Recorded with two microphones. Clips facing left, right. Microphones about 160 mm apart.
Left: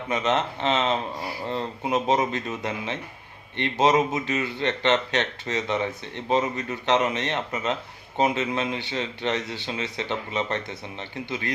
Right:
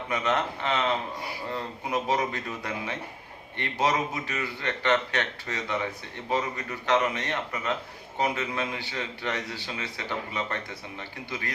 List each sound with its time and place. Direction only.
0.1 s speech: 20° left (ahead or behind)